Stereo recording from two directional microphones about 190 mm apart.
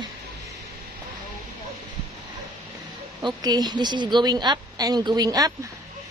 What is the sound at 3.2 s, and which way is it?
A woman's voice, 20° right (ahead or behind).